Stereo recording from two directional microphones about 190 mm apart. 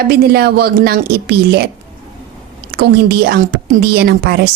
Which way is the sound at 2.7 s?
60° right (ahead or behind).